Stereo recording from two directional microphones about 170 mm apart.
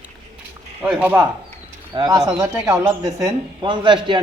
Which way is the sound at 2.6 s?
5° right (ahead or behind).